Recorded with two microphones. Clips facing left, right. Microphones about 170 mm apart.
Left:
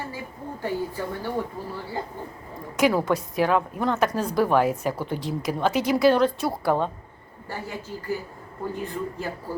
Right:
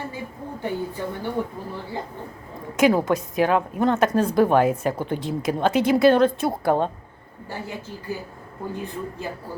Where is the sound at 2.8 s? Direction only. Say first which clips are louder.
Right 3 dB; 20° right (ahead or behind).